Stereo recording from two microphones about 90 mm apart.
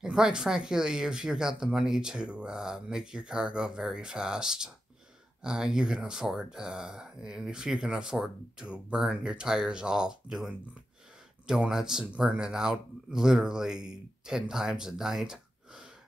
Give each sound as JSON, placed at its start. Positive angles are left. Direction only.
{"t": 0.0, "sound": "speech", "side_deg": -5}